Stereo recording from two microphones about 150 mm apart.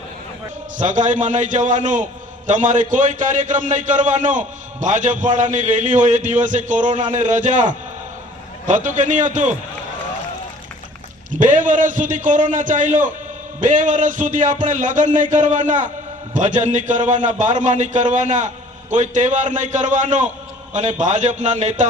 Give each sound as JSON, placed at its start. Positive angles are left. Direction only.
{"t": 0.8, "sound": "a man's voice", "side_deg": -55}
{"t": 11.5, "sound": "a man's voice", "side_deg": -60}